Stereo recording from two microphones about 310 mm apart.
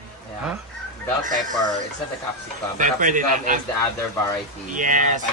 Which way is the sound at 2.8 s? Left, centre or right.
Right.